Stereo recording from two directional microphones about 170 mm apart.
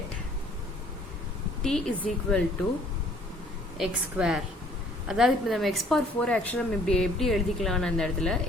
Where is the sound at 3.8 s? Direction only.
5° right (ahead or behind).